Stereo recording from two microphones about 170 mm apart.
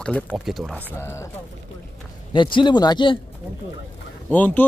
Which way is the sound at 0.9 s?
15° left (ahead or behind).